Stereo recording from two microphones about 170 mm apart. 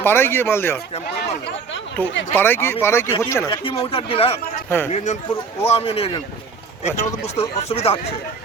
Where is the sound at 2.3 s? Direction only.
15° left (ahead or behind).